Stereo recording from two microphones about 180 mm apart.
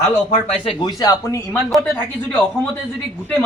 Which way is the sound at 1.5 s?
10° left (ahead or behind).